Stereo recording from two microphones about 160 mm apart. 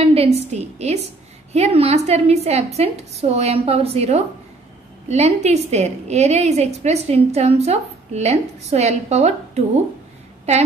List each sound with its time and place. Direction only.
0.0 s a woman's voice: 40° right (ahead or behind)